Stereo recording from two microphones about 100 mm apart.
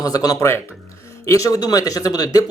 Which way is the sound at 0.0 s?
40° left (ahead or behind).